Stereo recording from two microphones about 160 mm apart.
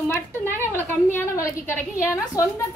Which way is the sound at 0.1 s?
15° left (ahead or behind).